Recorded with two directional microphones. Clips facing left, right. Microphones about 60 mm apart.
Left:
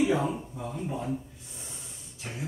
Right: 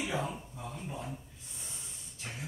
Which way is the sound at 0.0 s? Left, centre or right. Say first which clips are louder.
Left 9 dB; centre.